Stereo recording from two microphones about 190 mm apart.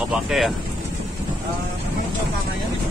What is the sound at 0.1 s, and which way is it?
Speech, centre (ahead or behind).